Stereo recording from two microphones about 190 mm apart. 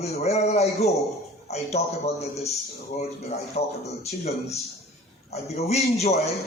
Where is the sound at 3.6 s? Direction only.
35° left (ahead or behind).